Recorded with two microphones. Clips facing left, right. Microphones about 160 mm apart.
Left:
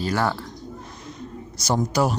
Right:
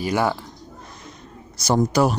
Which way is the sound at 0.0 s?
10° right (ahead or behind).